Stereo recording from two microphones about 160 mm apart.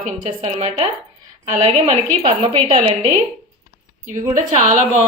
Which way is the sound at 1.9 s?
40° right (ahead or behind).